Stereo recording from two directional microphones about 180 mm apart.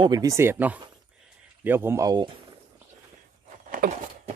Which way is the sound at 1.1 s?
5° right (ahead or behind).